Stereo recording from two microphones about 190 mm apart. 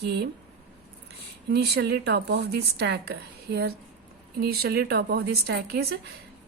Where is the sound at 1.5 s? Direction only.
55° right (ahead or behind).